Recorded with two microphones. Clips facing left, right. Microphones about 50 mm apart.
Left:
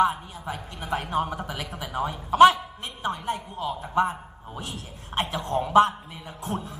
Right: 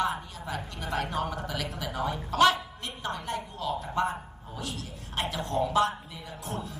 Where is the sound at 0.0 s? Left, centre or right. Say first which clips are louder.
Left 7 dB; centre.